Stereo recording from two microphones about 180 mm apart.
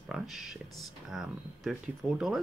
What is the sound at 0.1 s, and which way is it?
Speech, centre (ahead or behind).